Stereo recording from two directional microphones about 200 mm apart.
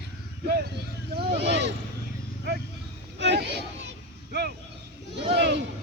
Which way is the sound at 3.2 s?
60° right (ahead or behind).